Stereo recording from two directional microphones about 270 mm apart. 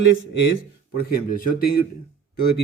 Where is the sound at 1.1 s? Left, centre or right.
Left.